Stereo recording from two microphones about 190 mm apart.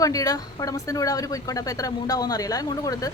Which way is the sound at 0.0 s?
20° left (ahead or behind).